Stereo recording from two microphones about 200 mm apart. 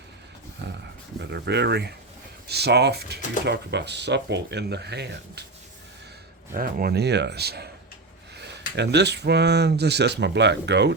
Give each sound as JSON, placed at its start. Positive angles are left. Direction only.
{"t": 0.6, "sound": "dog", "side_deg": -60}
{"t": 1.2, "sound": "speech", "side_deg": -60}
{"t": 6.5, "sound": "speech", "side_deg": -45}